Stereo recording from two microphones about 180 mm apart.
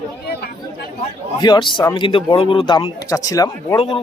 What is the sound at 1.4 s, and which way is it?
Speech, 25° left (ahead or behind).